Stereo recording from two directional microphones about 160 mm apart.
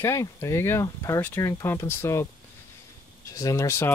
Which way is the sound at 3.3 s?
20° left (ahead or behind).